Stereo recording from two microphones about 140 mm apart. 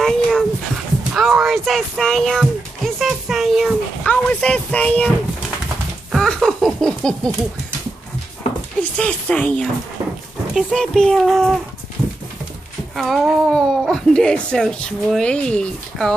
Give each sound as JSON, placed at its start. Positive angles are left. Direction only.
{"t": 0.0, "sound": "dog", "side_deg": 5}
{"t": 1.1, "sound": "speech", "side_deg": 0}
{"t": 6.1, "sound": "laughter", "side_deg": 0}
{"t": 8.9, "sound": "speech", "side_deg": 5}
{"t": 12.9, "sound": "speech", "side_deg": 0}